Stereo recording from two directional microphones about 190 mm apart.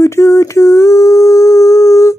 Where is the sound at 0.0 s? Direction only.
15° left (ahead or behind).